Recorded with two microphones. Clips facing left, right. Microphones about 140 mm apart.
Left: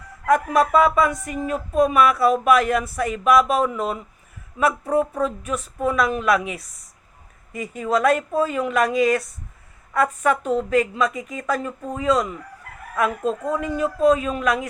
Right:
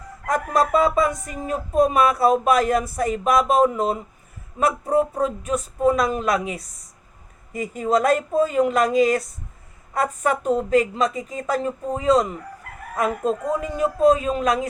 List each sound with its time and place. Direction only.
0.5 s speech: 35° right (ahead or behind)
10.4 s speech: 40° right (ahead or behind)